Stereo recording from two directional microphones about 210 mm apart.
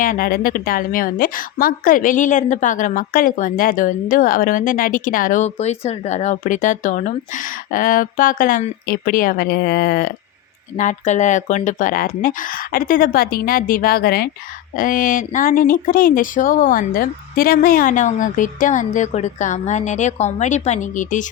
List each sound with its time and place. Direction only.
0.0 s a woman's voice: 40° left (ahead or behind)
10.8 s a woman's voice: 35° left (ahead or behind)